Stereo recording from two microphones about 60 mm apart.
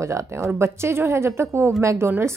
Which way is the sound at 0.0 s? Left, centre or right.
Right.